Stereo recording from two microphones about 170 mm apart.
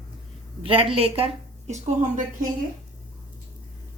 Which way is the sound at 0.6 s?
35° right (ahead or behind).